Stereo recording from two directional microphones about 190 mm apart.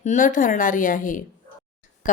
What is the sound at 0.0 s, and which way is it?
A woman's voice, 40° left (ahead or behind).